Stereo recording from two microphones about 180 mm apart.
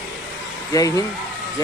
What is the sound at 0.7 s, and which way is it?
Speech, 20° left (ahead or behind).